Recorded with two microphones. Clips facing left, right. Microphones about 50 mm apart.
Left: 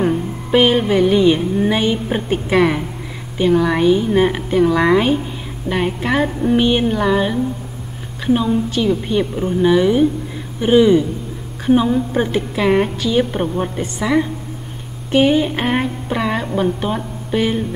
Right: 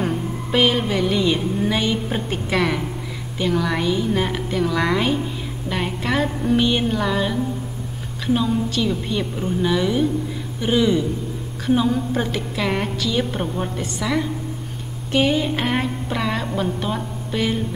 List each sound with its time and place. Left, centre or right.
0.0 s a woman's voice: centre